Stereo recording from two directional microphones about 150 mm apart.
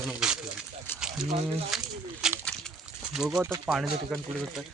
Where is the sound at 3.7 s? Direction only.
10° right (ahead or behind).